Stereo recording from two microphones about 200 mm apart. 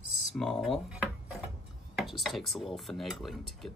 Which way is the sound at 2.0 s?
Centre (ahead or behind).